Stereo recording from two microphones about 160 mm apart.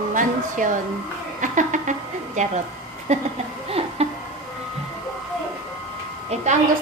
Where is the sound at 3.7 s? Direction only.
40° right (ahead or behind).